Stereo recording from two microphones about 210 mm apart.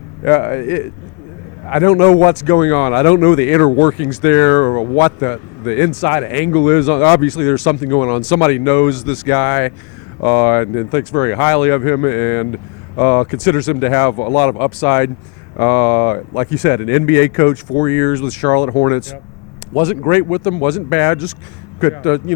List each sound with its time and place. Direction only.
0.3 s speech: 15° left (ahead or behind)